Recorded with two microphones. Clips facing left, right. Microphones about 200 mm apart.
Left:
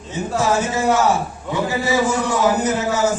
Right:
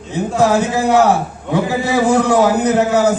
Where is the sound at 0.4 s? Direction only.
60° right (ahead or behind).